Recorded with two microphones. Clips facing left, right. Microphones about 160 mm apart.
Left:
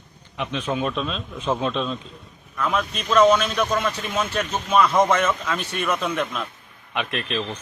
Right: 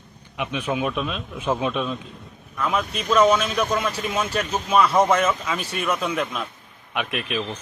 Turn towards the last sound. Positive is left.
turn(degrees=-10)  # may be behind; listen again after turning